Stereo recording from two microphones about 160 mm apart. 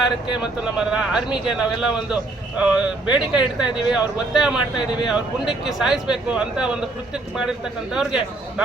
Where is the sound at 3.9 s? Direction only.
5° right (ahead or behind).